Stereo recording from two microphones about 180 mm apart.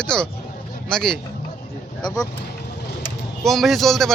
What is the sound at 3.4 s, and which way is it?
Speech, centre (ahead or behind).